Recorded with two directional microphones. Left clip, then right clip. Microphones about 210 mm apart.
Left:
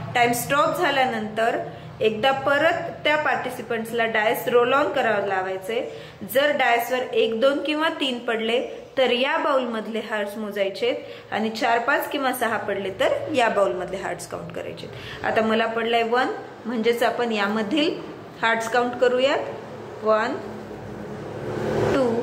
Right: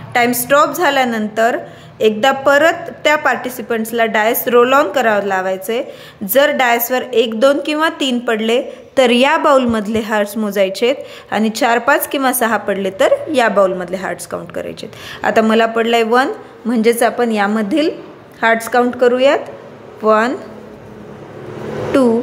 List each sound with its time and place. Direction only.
0.3 s a woman's voice: 55° right (ahead or behind)
21.9 s a woman's voice: 50° right (ahead or behind)